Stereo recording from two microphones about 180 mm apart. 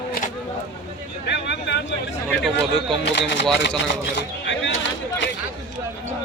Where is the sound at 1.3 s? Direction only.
70° left (ahead or behind).